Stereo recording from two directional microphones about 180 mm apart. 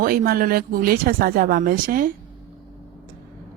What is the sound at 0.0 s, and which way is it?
Speech, 55° right (ahead or behind).